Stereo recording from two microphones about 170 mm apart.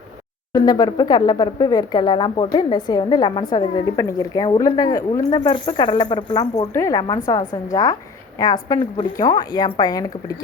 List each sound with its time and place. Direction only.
0.5 s speech: 20° left (ahead or behind)
6.7 s speech: 20° left (ahead or behind)